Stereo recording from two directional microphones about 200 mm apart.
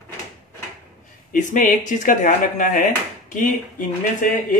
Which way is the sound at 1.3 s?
40° left (ahead or behind).